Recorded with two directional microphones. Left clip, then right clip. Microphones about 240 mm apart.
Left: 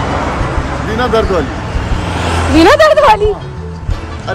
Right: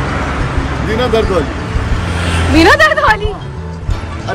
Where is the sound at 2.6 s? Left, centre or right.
Centre.